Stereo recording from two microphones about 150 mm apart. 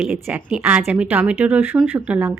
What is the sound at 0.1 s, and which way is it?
A woman's voice, 10° right (ahead or behind).